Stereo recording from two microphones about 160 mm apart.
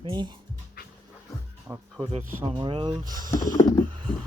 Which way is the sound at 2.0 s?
35° right (ahead or behind).